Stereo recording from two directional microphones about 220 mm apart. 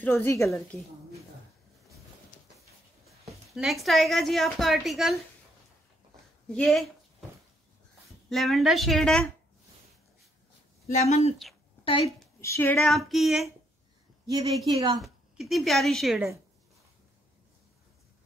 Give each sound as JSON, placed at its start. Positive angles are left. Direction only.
{"t": 0.0, "sound": "a woman's voice", "side_deg": 10}
{"t": 3.1, "sound": "a woman's voice", "side_deg": 0}
{"t": 6.5, "sound": "a woman's voice", "side_deg": 0}
{"t": 8.3, "sound": "a woman's voice", "side_deg": 0}
{"t": 10.9, "sound": "a woman's voice", "side_deg": 30}
{"t": 12.4, "sound": "a woman's voice", "side_deg": 10}
{"t": 14.7, "sound": "a woman's voice", "side_deg": -20}
{"t": 15.0, "sound": "a woman's voice", "side_deg": 0}